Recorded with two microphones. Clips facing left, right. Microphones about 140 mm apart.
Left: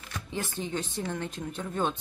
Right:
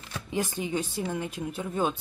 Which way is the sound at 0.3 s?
15° right (ahead or behind).